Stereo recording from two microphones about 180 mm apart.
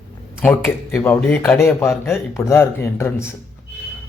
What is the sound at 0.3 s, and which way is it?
Speech, 10° left (ahead or behind).